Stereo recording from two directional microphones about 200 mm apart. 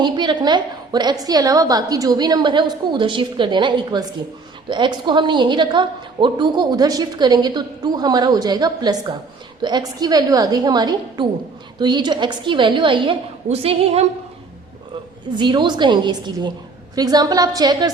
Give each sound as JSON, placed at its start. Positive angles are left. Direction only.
{"t": 0.0, "sound": "a woman's voice", "side_deg": -20}
{"t": 15.4, "sound": "a woman's voice", "side_deg": -20}